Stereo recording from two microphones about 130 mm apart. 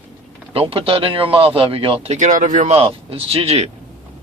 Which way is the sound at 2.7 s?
45° right (ahead or behind).